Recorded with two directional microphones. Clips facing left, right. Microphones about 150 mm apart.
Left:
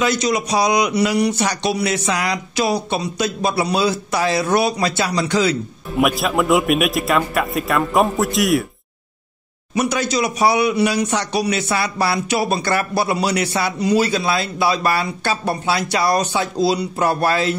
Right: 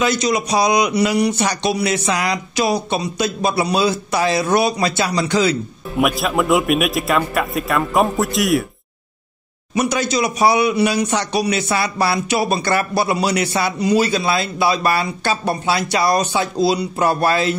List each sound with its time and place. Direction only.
0.0 s speech: 20° right (ahead or behind)
5.9 s a man's voice: centre (ahead or behind)
9.8 s speech: 20° right (ahead or behind)